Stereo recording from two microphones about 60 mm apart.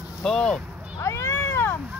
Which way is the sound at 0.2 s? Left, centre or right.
Centre.